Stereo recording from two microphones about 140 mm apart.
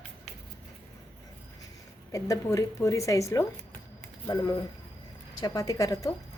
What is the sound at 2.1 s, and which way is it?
A woman's voice, 25° left (ahead or behind).